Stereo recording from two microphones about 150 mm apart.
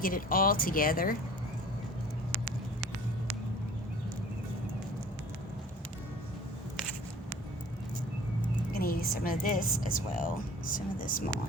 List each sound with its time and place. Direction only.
0.0 s a woman's voice: 70° left (ahead or behind)
8.7 s a woman's voice: 75° left (ahead or behind)